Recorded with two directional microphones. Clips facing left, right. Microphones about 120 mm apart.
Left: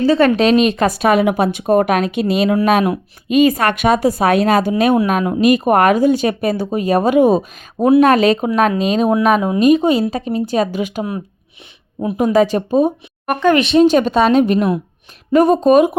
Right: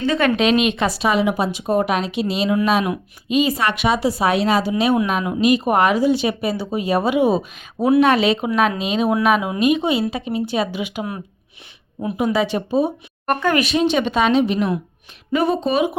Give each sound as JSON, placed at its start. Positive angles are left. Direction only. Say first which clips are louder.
{"t": 0.0, "sound": "a woman's voice", "louder": "left 5 dB", "side_deg": 35}
{"t": 12.1, "sound": "speech", "louder": "left 6 dB", "side_deg": 40}
{"t": 13.4, "sound": "speech", "louder": "left 7 dB", "side_deg": 20}
{"t": 13.7, "sound": "speech", "louder": "left 7 dB", "side_deg": 40}
{"t": 14.3, "sound": "speech", "louder": "left 4 dB", "side_deg": 45}